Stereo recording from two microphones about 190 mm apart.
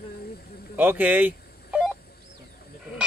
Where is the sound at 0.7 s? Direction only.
10° right (ahead or behind).